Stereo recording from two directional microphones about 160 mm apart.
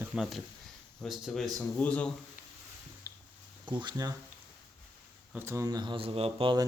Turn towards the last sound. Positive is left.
turn(degrees=-35)  # may be behind; listen again after turning